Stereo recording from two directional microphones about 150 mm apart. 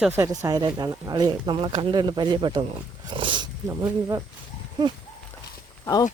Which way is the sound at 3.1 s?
35° right (ahead or behind).